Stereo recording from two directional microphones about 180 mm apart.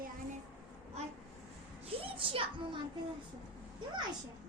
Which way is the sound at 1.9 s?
30° right (ahead or behind).